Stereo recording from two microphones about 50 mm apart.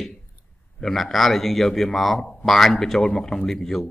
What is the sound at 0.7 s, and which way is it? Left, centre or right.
A man's voice, centre.